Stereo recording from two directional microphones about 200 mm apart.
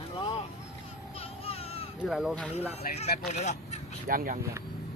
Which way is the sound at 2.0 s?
Centre (ahead or behind).